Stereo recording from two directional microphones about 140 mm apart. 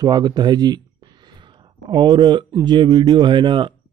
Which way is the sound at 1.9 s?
35° right (ahead or behind).